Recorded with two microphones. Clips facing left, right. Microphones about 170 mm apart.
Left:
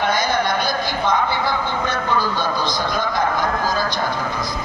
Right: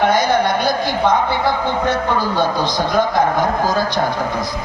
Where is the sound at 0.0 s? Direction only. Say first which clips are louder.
Right 5 dB; 65° right (ahead or behind).